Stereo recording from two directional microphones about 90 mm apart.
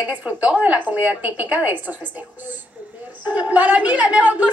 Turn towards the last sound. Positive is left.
turn(degrees=-20)  # may be behind; listen again after turning